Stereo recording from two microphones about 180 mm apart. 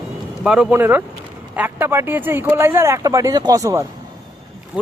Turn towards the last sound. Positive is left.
turn(degrees=-5)  # may be behind; listen again after turning